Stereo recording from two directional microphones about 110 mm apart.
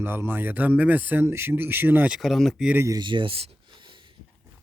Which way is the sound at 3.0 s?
45° right (ahead or behind).